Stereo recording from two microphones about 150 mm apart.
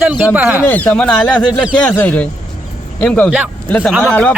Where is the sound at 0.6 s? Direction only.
10° left (ahead or behind).